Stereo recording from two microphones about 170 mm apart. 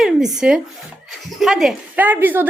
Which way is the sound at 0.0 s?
5° right (ahead or behind).